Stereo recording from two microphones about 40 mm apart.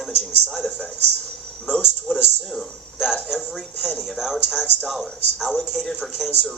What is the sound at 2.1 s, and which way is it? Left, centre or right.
Speech, centre.